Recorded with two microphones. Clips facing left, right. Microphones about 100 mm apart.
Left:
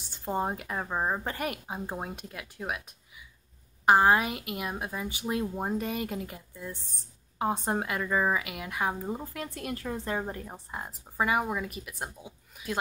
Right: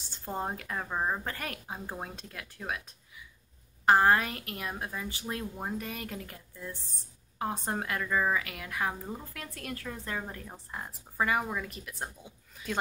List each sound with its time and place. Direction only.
0.1 s a woman's voice: 15° left (ahead or behind)